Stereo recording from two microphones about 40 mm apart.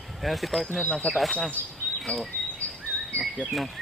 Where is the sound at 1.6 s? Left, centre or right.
Right.